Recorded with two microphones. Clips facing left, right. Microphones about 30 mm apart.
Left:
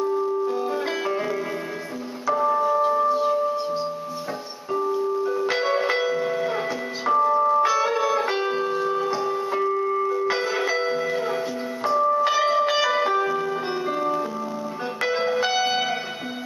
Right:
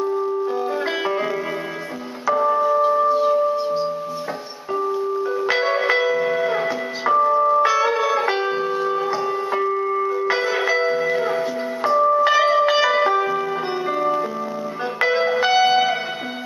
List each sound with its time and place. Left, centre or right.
0.5 s music: centre
2.2 s music: centre